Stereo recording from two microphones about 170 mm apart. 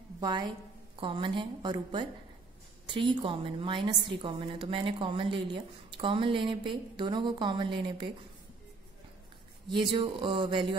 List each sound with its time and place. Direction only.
0.2 s a woman's voice: 25° right (ahead or behind)
9.7 s a woman's voice: 30° right (ahead or behind)